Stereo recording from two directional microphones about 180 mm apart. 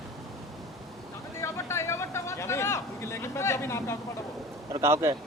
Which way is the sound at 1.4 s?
15° left (ahead or behind).